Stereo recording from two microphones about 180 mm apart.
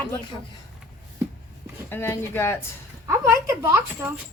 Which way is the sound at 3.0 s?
15° right (ahead or behind).